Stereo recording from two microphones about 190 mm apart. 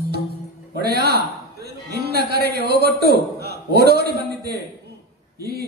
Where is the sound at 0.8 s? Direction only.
60° right (ahead or behind).